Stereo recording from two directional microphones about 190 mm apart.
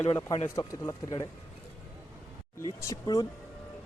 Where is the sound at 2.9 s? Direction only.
20° left (ahead or behind).